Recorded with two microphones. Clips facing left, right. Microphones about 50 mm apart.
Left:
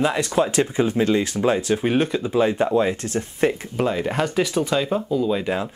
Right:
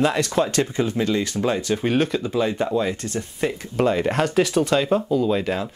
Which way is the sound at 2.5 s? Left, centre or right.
Centre.